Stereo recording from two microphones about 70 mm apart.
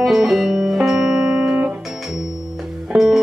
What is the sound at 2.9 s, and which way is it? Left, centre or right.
Music, right.